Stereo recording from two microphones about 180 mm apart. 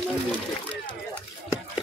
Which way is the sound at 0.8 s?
10° left (ahead or behind).